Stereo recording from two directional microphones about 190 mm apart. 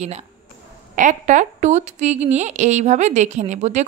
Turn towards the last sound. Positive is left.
turn(degrees=-35)  # may be behind; listen again after turning